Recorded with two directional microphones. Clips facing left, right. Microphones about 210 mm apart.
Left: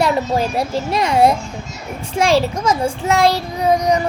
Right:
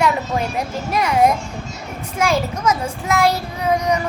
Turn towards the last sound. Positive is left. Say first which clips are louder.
# left 3 dB
turn(degrees=30)  # may be behind; listen again after turning